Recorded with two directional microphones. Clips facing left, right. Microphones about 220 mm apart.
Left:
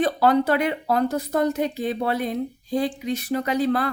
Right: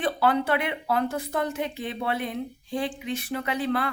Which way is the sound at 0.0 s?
40° left (ahead or behind).